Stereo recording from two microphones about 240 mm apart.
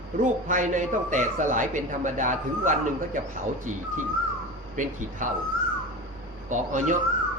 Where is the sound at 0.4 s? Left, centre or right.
Right.